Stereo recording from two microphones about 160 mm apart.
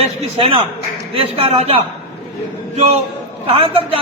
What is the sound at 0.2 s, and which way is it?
A man's voice, 35° right (ahead or behind).